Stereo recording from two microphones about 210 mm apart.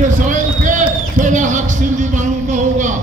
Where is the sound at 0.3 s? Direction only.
35° right (ahead or behind).